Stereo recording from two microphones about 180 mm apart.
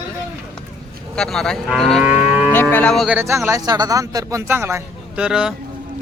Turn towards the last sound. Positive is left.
turn(degrees=-5)  # may be behind; listen again after turning